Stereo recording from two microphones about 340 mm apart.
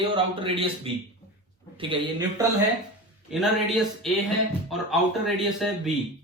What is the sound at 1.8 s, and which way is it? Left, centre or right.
Speech, centre.